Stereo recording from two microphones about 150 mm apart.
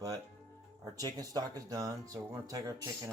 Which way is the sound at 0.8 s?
25° right (ahead or behind).